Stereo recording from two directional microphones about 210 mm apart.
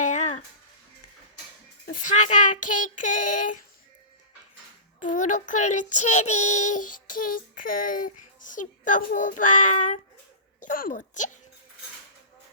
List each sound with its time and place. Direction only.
0.0 s a sound: 35° left (ahead or behind)
1.9 s child singing: 35° left (ahead or behind)
4.9 s child singing: 35° left (ahead or behind)
10.6 s speech: 40° left (ahead or behind)